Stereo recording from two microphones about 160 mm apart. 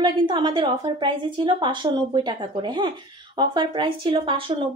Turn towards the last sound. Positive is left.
turn(degrees=-30)  # may be behind; listen again after turning